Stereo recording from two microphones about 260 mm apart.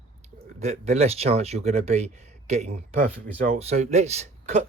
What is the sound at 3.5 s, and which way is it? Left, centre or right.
Speech, right.